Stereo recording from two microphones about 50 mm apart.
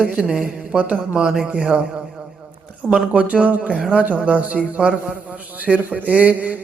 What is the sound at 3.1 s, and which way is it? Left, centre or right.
A man's voice, right.